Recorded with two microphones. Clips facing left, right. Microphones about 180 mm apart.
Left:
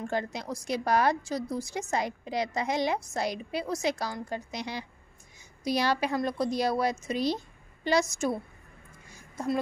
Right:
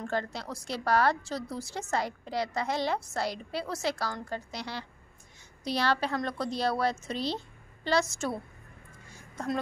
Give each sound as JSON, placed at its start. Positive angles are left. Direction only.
{"t": 0.0, "sound": "a woman's voice", "side_deg": 15}